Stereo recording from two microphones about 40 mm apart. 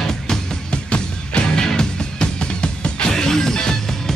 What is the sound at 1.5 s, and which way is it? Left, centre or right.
Music, centre.